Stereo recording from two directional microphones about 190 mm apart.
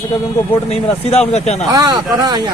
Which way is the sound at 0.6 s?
35° left (ahead or behind).